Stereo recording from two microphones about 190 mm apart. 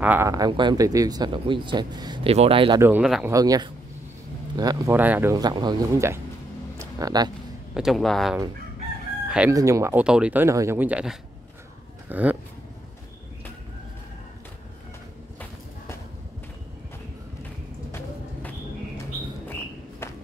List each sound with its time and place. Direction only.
0.0 s speech: 10° right (ahead or behind); by 2.8 s 30° right (ahead or behind)
2.8 s speech: 5° right (ahead or behind)
3.3 s speech: 20° right (ahead or behind)
4.9 s speech: 10° right (ahead or behind)
6.8 s a sound: 20° right (ahead or behind)
7.7 s speech: centre (ahead or behind)
9.5 s speech: 15° right (ahead or behind)
20.0 s walk: 15° left (ahead or behind)